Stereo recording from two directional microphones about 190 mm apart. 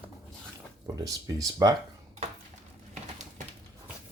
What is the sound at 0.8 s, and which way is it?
Speech, 20° right (ahead or behind).